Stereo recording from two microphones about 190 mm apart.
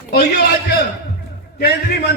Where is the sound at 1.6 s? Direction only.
55° left (ahead or behind).